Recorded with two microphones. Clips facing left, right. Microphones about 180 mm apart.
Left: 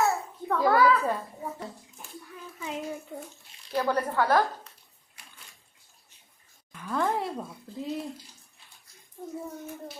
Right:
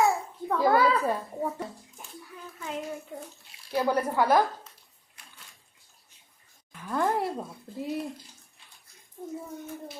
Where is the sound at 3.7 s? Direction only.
10° right (ahead or behind).